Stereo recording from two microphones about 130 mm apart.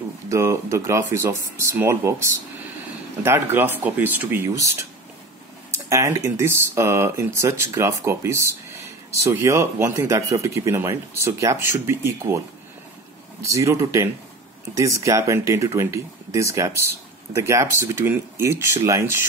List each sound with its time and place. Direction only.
0.3 s speech: 25° right (ahead or behind)
13.4 s speech: 25° right (ahead or behind)